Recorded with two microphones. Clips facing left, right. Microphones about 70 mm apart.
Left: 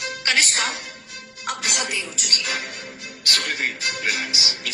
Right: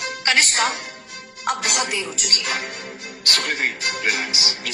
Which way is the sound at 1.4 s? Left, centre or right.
Right.